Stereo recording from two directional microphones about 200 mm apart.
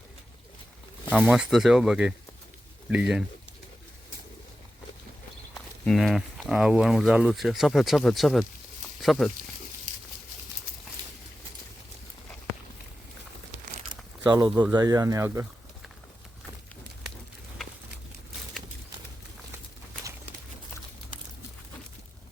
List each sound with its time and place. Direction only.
1.1 s speech: centre (ahead or behind)
5.5 s speech: 5° left (ahead or behind)
9.9 s dog: 40° right (ahead or behind)
14.3 s speech: 20° right (ahead or behind)